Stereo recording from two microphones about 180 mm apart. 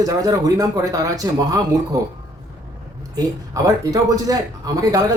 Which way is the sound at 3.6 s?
20° right (ahead or behind).